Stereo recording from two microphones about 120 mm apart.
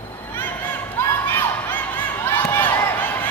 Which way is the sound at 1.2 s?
15° left (ahead or behind).